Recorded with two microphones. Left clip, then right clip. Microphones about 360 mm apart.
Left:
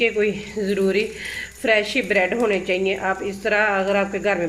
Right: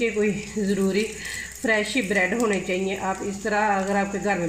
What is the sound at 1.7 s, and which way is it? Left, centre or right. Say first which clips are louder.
A woman's voice: left 4 dB; left.